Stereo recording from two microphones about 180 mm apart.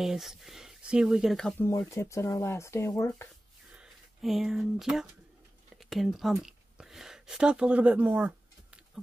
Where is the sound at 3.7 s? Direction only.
5° right (ahead or behind).